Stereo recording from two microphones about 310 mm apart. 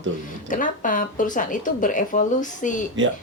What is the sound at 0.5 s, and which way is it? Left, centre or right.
Speech, left.